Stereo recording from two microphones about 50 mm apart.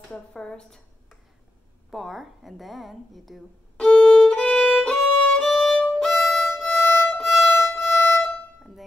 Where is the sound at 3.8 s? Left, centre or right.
Centre.